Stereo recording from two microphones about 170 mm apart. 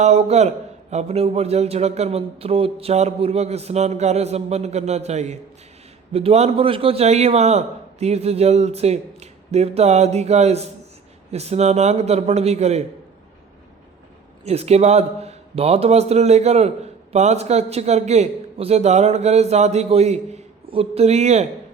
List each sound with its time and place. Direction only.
0.0 s speech: 40° right (ahead or behind)
14.4 s speech: 40° right (ahead or behind)